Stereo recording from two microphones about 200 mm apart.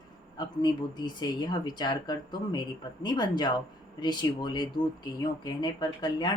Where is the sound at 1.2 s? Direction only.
20° left (ahead or behind).